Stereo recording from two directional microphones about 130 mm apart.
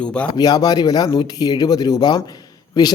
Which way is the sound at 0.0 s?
10° left (ahead or behind).